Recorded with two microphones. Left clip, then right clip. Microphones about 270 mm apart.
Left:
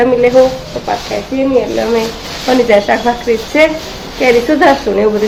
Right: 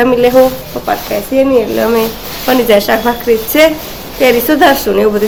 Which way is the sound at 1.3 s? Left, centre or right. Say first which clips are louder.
Right 3 dB; centre.